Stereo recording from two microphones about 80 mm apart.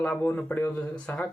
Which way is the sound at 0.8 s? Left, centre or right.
Centre.